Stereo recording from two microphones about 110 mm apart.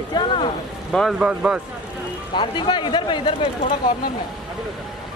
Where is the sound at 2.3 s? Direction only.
45° left (ahead or behind).